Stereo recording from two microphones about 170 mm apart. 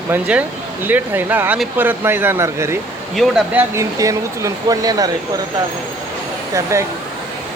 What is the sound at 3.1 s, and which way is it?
Speech, 5° right (ahead or behind).